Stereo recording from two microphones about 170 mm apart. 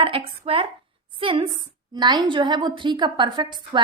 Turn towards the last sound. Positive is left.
turn(degrees=-25)  # may be behind; listen again after turning